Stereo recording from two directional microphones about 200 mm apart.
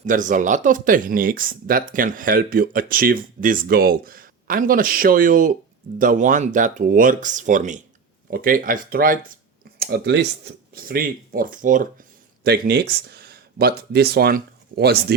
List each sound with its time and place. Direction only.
0.0 s speech: 40° right (ahead or behind)
12.4 s speech: 50° right (ahead or behind)